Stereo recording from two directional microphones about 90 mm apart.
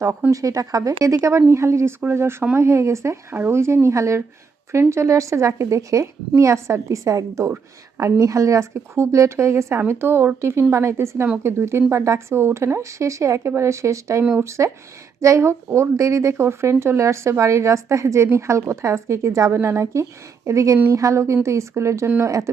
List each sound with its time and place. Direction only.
0.3 s a woman's voice: 40° right (ahead or behind)